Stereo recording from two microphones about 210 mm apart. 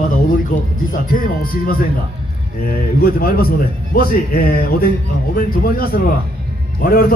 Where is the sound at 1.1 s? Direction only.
45° left (ahead or behind).